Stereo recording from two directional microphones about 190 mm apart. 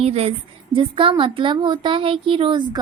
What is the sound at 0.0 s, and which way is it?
A woman's voice, 35° right (ahead or behind).